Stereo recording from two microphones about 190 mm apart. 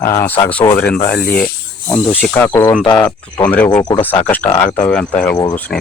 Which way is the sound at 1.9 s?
10° left (ahead or behind).